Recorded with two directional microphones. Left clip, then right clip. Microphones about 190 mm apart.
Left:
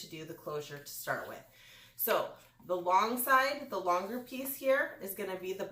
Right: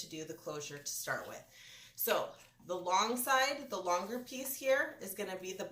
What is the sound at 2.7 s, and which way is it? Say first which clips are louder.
Speech: left 4 dB; 25° right (ahead or behind).